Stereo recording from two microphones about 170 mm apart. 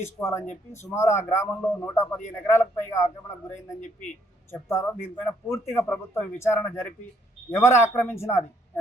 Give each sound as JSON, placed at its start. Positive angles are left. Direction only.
{"t": 0.0, "sound": "a man's voice", "side_deg": 15}
{"t": 4.5, "sound": "a man's voice", "side_deg": 15}